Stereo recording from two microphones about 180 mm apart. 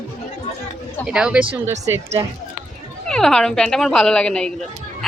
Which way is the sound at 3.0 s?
5° left (ahead or behind).